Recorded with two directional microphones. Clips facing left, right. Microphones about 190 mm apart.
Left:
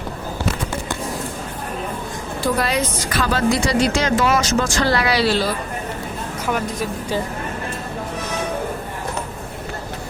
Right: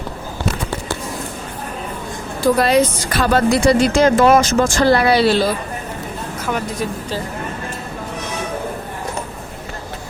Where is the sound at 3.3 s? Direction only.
55° right (ahead or behind).